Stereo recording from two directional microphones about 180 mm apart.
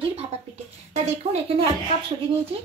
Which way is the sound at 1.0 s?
35° right (ahead or behind).